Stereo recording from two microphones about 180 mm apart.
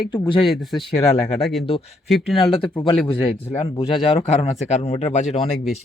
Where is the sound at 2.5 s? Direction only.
30° left (ahead or behind).